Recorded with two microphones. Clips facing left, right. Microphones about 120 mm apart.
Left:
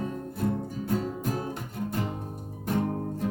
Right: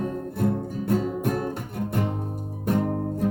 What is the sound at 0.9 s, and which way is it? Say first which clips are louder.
Music: right 6 dB; 60° right (ahead or behind).